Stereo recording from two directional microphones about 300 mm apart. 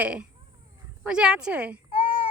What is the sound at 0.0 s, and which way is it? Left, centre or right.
Speech, centre.